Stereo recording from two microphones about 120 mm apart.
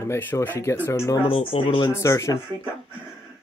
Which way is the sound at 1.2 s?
45° left (ahead or behind).